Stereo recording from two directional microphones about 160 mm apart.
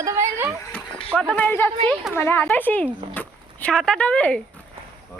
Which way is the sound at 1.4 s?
10° left (ahead or behind).